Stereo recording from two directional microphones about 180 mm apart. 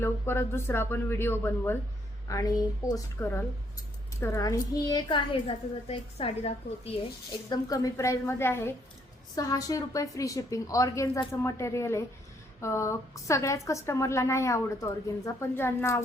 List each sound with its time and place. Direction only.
0.0 s a woman's voice: 15° left (ahead or behind)